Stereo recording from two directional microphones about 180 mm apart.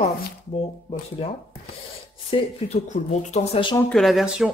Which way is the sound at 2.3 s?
35° left (ahead or behind).